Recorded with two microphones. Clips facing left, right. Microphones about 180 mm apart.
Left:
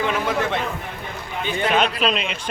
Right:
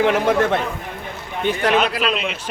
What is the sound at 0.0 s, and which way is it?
Speech, 60° right (ahead or behind).